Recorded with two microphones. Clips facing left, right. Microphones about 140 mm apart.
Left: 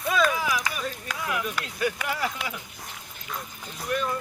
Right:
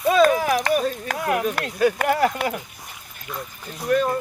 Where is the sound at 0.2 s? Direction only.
50° right (ahead or behind).